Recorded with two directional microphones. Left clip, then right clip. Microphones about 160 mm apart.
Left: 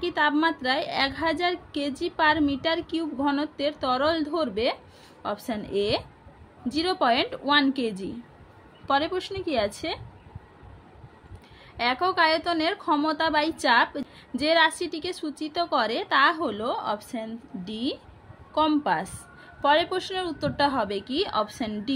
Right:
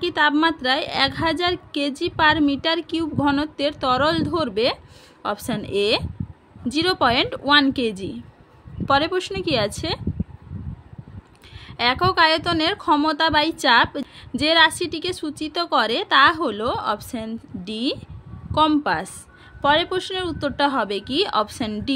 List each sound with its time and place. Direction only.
0.0 s a woman's voice: 40° right (ahead or behind)
11.7 s a woman's voice: 40° right (ahead or behind)